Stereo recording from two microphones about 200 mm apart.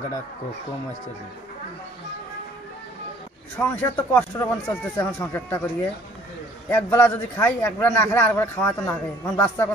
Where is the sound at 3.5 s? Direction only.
10° left (ahead or behind).